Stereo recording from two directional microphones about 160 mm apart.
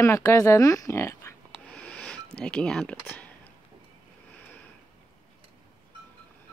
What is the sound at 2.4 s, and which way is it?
Speech, 5° left (ahead or behind).